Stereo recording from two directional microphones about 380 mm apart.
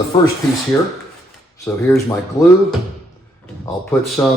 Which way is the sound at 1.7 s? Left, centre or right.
Centre.